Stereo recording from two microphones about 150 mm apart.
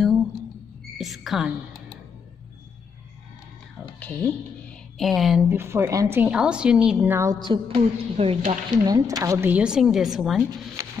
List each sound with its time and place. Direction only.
0.9 s a woman's voice: centre (ahead or behind)
4.0 s speech: 10° left (ahead or behind)
5.5 s a woman's voice: 15° right (ahead or behind)
7.4 s a woman's voice: 35° right (ahead or behind)
8.6 s a woman's voice: 25° right (ahead or behind); by 10.4 s 5° right (ahead or behind)
10.8 s music: 20° right (ahead or behind)